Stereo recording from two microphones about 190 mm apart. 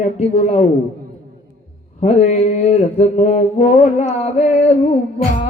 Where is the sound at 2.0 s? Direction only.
35° left (ahead or behind).